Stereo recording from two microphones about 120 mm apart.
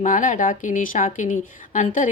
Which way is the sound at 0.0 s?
90° left.